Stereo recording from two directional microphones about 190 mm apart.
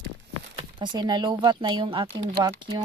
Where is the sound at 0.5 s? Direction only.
25° right (ahead or behind).